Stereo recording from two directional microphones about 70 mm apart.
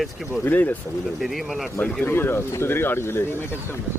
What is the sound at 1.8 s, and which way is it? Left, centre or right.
Speech, left.